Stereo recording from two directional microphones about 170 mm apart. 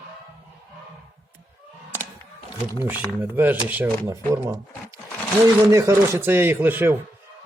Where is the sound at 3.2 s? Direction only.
10° right (ahead or behind).